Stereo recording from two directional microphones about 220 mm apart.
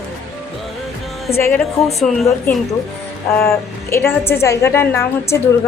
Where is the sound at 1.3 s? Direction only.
10° left (ahead or behind).